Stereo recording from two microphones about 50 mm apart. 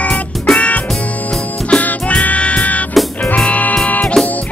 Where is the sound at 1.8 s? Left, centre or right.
Left.